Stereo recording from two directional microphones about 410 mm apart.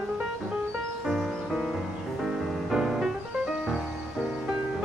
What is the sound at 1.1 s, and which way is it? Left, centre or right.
Music, centre.